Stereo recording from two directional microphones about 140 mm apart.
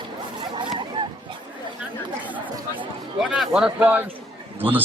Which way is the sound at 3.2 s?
5° right (ahead or behind).